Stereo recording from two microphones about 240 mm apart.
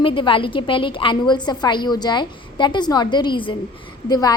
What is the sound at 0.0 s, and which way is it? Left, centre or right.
A woman's voice, left.